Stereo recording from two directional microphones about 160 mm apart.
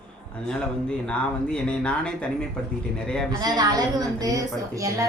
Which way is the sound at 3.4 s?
25° right (ahead or behind).